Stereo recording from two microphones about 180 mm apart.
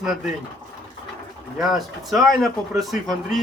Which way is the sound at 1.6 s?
Centre (ahead or behind).